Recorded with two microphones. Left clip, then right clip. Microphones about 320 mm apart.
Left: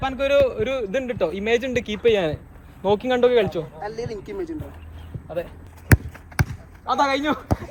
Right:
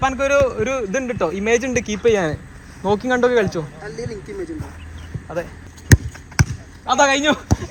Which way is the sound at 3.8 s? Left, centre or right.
Left.